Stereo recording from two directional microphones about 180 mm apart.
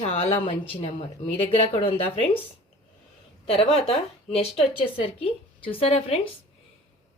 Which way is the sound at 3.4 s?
30° left (ahead or behind).